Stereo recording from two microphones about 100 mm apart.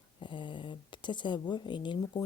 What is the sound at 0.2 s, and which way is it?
Speech, 55° left (ahead or behind).